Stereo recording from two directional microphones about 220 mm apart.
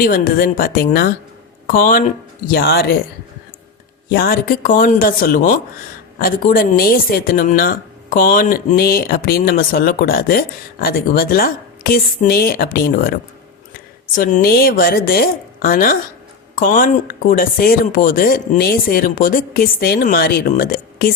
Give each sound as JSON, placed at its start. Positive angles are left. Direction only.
{"t": 0.0, "sound": "speech", "side_deg": 40}
{"t": 4.1, "sound": "speech", "side_deg": 40}
{"t": 14.2, "sound": "speech", "side_deg": 35}